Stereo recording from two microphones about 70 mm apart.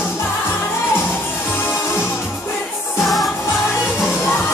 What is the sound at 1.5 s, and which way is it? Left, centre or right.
Music, left.